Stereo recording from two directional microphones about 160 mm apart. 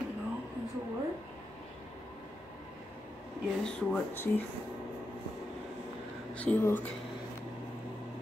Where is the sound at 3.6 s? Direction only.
10° left (ahead or behind).